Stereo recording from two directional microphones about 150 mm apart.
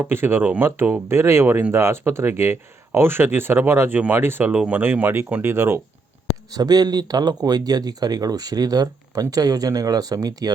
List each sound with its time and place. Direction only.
0.0 s speech: 15° right (ahead or behind)
6.5 s speech: 25° right (ahead or behind)